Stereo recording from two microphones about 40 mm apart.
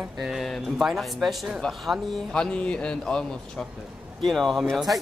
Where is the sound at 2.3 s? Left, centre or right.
Left.